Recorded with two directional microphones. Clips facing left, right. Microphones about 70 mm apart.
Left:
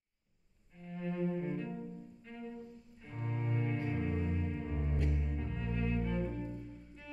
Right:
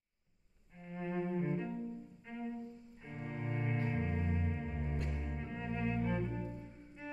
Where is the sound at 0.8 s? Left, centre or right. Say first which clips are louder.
Left 2 dB; centre.